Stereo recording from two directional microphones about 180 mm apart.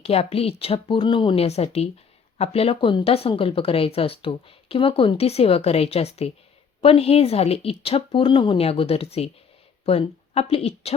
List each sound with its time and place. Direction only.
0.0 s speech: 35° left (ahead or behind)